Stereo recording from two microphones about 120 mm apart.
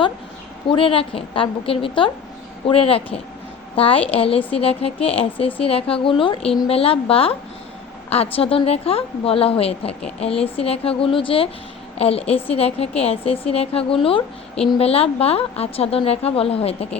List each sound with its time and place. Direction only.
0.7 s a woman's voice: 50° left (ahead or behind)